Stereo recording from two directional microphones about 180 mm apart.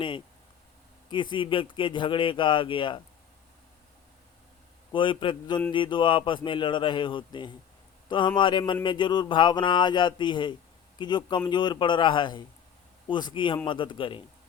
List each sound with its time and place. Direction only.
1.1 s speech: 25° left (ahead or behind)
4.9 s speech: 30° left (ahead or behind)